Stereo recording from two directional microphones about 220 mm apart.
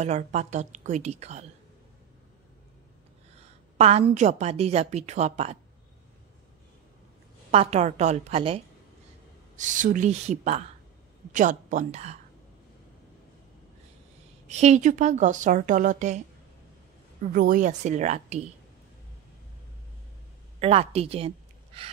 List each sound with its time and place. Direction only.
0.0 s a woman's voice: 30° right (ahead or behind)
3.7 s a woman's voice: 25° right (ahead or behind)
7.5 s a woman's voice: 30° right (ahead or behind)
14.5 s a woman's voice: 30° right (ahead or behind)
17.3 s a woman's voice: 40° right (ahead or behind)
20.6 s a woman's voice: 25° right (ahead or behind)